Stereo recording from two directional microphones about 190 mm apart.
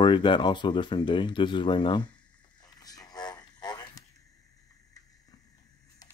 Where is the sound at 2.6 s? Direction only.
20° left (ahead or behind).